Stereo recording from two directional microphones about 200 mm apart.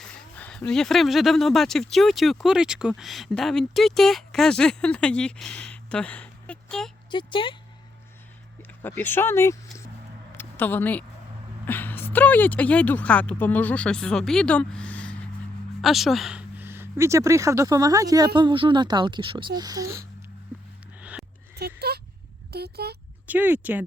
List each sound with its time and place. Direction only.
0.0 s speech: 5° left (ahead or behind)
7.1 s speech: 25° left (ahead or behind)
8.8 s speech: 10° left (ahead or behind)
10.3 s a sound: 10° left (ahead or behind)
11.6 s speech: 10° left (ahead or behind); by 20.1 s 15° right (ahead or behind)
21.0 s a sound: 5° right (ahead or behind)
21.8 s a sound: 55° right (ahead or behind)
22.5 s speech: 55° right (ahead or behind)
23.2 s speech: 10° right (ahead or behind)